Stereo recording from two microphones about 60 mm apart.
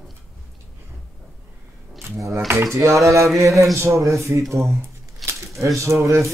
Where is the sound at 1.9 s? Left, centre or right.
Right.